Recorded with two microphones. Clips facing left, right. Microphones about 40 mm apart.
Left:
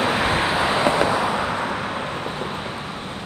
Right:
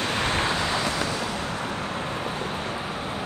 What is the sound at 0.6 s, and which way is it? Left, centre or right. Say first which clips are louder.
Vehicle: left 7 dB; left.